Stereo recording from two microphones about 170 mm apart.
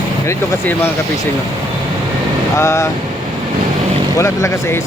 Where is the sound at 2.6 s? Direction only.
15° left (ahead or behind).